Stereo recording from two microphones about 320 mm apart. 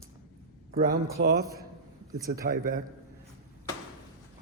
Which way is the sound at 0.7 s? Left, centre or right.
Right.